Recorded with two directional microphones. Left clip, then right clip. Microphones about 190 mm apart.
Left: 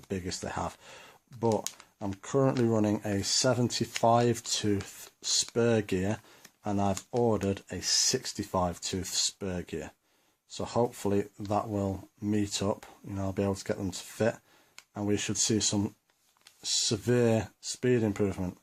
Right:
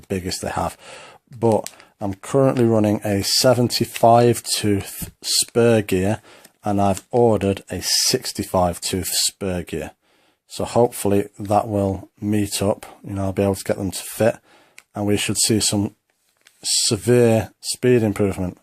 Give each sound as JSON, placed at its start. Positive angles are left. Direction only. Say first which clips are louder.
{"t": 0.1, "sound": "speech", "louder": "right 11 dB", "side_deg": -45}